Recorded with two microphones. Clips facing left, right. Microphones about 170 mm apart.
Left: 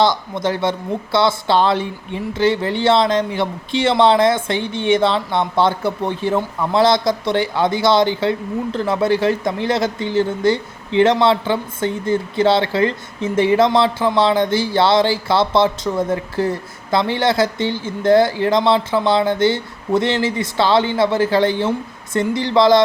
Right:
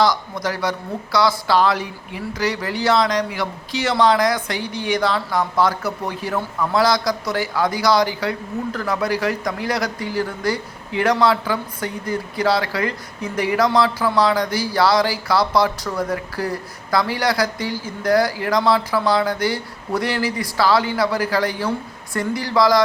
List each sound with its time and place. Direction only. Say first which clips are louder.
0.0 s speech: left 2 dB; 25° left (ahead or behind)